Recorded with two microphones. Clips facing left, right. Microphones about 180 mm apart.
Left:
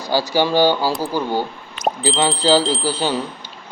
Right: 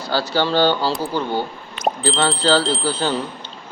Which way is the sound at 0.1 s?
15° left (ahead or behind).